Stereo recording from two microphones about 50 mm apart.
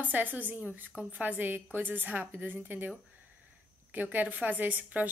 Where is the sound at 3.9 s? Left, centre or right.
Right.